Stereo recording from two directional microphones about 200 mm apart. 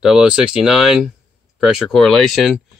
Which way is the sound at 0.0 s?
5° right (ahead or behind).